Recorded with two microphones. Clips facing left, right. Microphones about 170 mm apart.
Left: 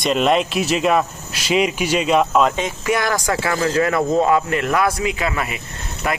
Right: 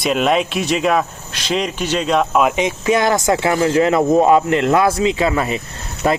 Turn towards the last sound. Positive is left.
turn(degrees=-35)  # may be behind; listen again after turning